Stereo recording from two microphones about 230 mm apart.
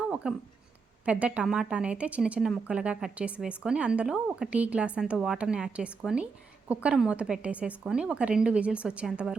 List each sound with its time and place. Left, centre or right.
0.1 s speech: centre